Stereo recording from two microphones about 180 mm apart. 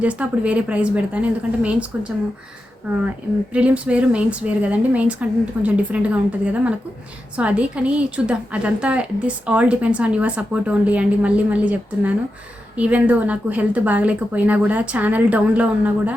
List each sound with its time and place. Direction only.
0.0 s a woman's voice: 10° right (ahead or behind)